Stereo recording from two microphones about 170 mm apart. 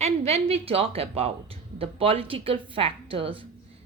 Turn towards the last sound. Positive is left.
turn(degrees=-30)  # may be behind; listen again after turning